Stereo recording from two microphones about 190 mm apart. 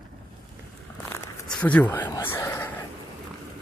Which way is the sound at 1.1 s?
10° left (ahead or behind).